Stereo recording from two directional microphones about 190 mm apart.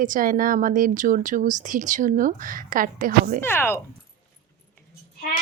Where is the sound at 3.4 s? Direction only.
10° left (ahead or behind).